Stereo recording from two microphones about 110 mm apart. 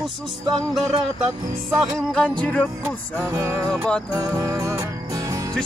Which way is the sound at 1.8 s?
5° left (ahead or behind).